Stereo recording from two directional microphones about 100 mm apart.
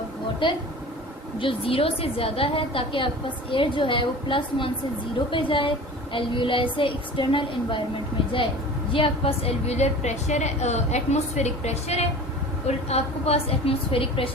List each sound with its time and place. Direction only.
0.4 s a woman's voice: 60° left (ahead or behind)
8.9 s a woman's voice: 65° left (ahead or behind)